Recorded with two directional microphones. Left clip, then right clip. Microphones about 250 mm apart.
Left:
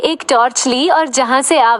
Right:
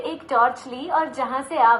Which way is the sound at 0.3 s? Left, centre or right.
Left.